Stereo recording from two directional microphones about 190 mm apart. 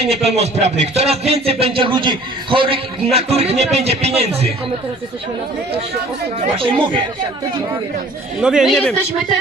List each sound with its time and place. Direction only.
0.0 s speech: 35° right (ahead or behind)
6.6 s speech: 25° right (ahead or behind)
8.4 s speech: 5° right (ahead or behind)